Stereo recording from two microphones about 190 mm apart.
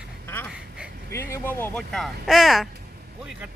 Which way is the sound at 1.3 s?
10° left (ahead or behind).